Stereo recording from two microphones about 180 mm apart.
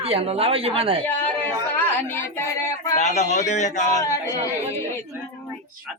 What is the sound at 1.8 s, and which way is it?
A woman's voice, 15° left (ahead or behind).